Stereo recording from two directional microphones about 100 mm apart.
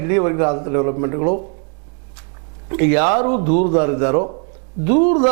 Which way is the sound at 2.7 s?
15° right (ahead or behind).